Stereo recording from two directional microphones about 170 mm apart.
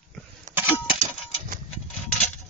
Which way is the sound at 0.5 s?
45° right (ahead or behind).